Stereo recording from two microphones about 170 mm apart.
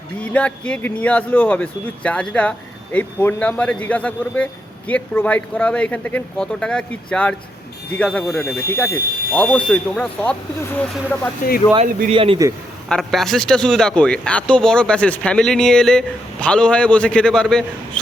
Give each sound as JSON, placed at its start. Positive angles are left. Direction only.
{"t": 0.3, "sound": "speech", "side_deg": 5}
{"t": 12.1, "sound": "a man's voice", "side_deg": -30}
{"t": 12.9, "sound": "speech", "side_deg": 0}